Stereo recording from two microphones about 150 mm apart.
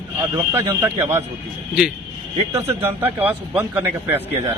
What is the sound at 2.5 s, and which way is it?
A man's voice, 20° right (ahead or behind).